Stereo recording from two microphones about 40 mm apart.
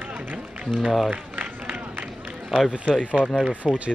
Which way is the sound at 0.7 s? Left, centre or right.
Centre.